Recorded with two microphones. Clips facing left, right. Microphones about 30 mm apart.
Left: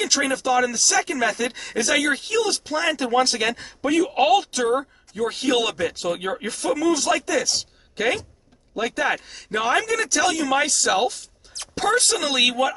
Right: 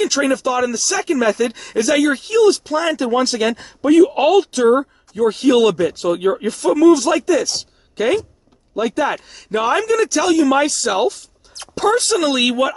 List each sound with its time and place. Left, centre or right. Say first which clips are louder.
0.0 s speech: right 5 dB; centre